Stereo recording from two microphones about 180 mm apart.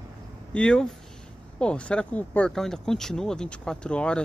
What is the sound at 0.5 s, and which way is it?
Speech, 5° left (ahead or behind).